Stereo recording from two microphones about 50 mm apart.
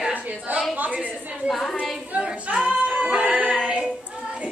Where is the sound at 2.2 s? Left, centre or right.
Right.